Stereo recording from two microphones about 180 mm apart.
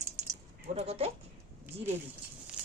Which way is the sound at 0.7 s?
35° right (ahead or behind).